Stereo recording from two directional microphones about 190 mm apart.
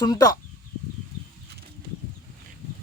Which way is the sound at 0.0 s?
20° left (ahead or behind).